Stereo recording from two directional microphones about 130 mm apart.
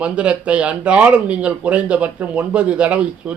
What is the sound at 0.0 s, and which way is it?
Speech, 10° right (ahead or behind).